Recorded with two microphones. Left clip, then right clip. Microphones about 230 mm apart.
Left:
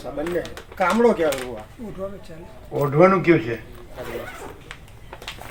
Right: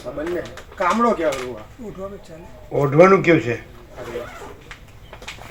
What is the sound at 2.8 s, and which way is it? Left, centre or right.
Speech, right.